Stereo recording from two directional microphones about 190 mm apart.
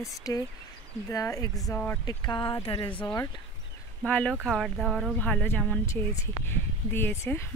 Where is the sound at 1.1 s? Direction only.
20° left (ahead or behind).